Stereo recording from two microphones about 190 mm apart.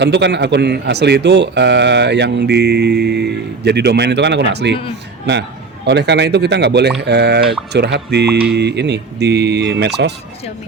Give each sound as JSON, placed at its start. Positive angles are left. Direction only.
{"t": 0.0, "sound": "a man's voice", "side_deg": -65}
{"t": 5.8, "sound": "a man's voice", "side_deg": -65}